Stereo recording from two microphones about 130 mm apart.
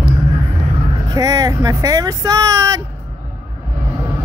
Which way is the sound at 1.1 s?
25° right (ahead or behind).